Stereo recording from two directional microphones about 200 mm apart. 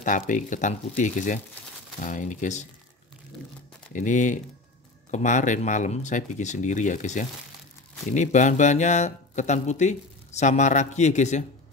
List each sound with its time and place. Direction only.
0.0 s speech: 40° left (ahead or behind)
3.9 s speech: 40° left (ahead or behind)